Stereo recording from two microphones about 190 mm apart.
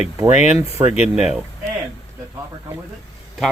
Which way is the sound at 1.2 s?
5° right (ahead or behind).